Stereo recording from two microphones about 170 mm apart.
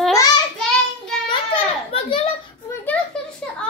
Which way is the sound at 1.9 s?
35° left (ahead or behind).